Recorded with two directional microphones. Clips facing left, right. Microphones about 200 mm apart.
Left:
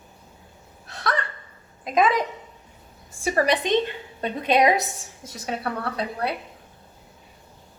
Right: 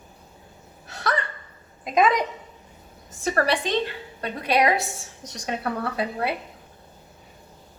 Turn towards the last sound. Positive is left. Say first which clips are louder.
# right 1 dB
turn(degrees=0)  # may be behind; listen again after turning